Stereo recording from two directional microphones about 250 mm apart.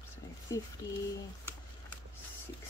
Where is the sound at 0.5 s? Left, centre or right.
Centre.